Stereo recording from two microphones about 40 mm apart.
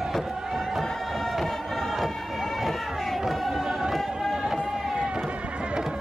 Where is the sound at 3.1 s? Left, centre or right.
Centre.